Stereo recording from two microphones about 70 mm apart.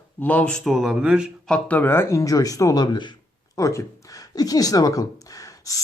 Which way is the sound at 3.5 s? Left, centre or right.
Left.